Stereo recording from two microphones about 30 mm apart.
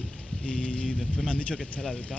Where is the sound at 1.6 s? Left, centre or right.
Left.